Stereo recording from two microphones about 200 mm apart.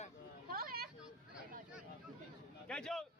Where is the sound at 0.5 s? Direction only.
50° right (ahead or behind).